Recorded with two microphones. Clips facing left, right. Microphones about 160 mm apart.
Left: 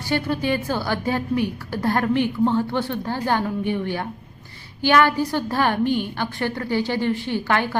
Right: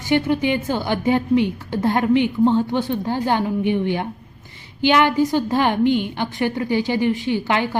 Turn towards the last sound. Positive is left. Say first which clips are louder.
# right 2 dB
turn(degrees=-15)  # may be behind; listen again after turning